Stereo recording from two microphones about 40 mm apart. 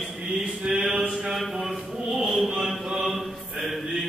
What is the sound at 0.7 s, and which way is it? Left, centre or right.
Mantra, right.